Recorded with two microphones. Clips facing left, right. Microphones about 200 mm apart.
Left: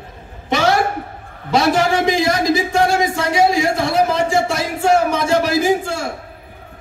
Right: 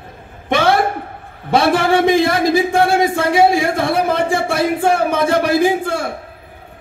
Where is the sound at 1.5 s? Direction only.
55° right (ahead or behind).